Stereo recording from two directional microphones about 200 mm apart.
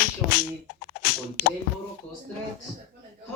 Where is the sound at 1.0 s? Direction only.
50° left (ahead or behind).